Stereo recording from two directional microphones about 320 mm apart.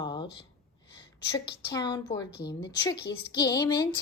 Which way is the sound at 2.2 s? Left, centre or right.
Left.